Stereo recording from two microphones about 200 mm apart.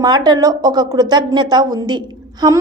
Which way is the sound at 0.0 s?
20° right (ahead or behind).